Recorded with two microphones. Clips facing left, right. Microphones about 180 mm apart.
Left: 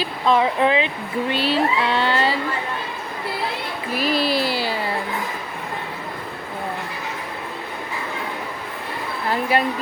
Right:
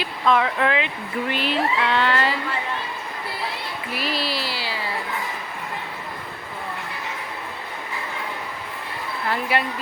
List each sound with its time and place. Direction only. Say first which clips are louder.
0.0 s speech: left 2 dB; 30° left (ahead or behind)
3.9 s speech: left 7 dB; 45° left (ahead or behind)